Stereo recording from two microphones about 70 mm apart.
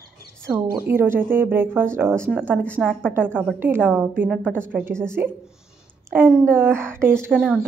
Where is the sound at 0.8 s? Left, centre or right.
Right.